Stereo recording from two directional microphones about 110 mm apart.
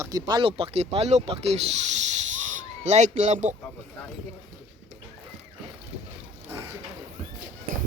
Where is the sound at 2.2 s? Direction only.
90° right.